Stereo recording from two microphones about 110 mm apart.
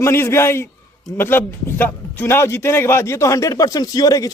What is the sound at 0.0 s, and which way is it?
A man's voice, 25° left (ahead or behind).